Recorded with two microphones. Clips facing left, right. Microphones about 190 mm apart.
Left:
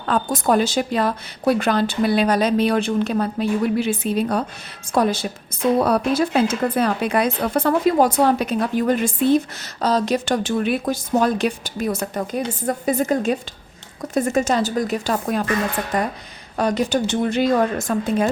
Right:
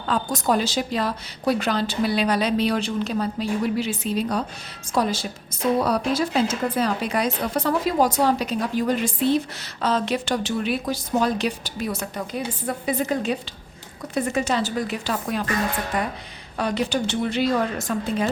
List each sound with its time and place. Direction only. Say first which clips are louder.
0.0 s a woman's voice: left 3 dB; 55° left (ahead or behind)